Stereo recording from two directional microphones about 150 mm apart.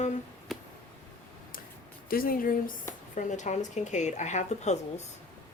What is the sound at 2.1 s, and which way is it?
Speech, 75° left (ahead or behind).